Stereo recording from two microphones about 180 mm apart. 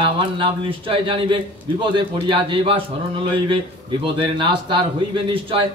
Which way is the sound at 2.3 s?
30° right (ahead or behind).